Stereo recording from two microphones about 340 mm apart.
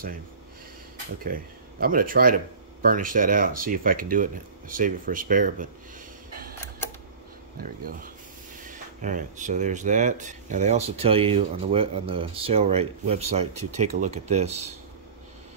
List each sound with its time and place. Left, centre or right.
1.2 s speech: right
8.6 s speech: right